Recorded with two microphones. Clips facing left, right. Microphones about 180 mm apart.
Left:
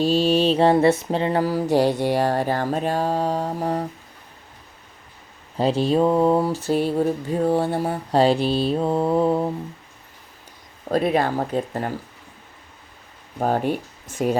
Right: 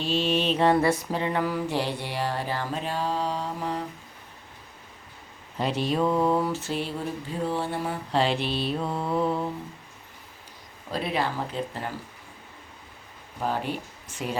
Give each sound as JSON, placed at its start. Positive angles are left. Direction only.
{"t": 0.0, "sound": "mantra", "side_deg": 40}
{"t": 5.5, "sound": "a sound", "side_deg": 30}
{"t": 10.8, "sound": "mantra", "side_deg": 50}
{"t": 13.4, "sound": "mantra", "side_deg": 50}